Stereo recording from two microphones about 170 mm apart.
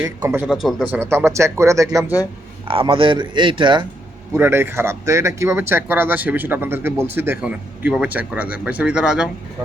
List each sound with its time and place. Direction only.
0.0 s speech: 15° right (ahead or behind)
0.4 s speech: centre (ahead or behind)
0.9 s speech: 15° right (ahead or behind)
2.6 s speech: 30° right (ahead or behind)
4.4 s speech: 10° right (ahead or behind)